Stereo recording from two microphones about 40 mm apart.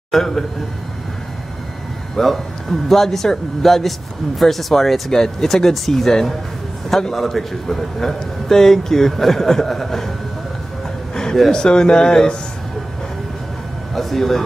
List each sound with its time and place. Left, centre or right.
0.1 s a man's voice: centre
2.1 s a man's voice: centre
11.5 s speech: centre
13.9 s a man's voice: centre